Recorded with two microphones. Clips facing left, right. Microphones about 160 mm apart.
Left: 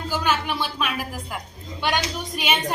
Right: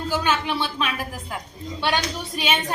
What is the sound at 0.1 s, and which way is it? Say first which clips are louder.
A woman's voice: even; 10° left (ahead or behind).